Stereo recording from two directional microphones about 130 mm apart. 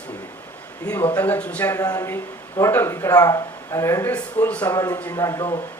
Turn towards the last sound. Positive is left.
turn(degrees=25)  # may be behind; listen again after turning